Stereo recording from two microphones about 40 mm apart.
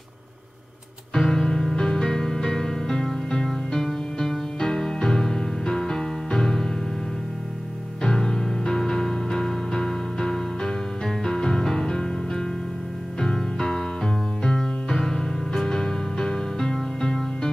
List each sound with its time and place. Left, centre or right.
1.1 s music: centre
8.0 s music: centre